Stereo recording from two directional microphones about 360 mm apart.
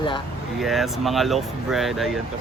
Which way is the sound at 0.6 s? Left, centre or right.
Centre.